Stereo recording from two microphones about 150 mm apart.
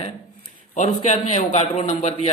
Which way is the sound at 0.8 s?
50° left (ahead or behind).